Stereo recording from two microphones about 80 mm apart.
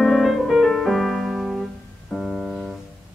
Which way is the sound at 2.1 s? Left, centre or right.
Centre.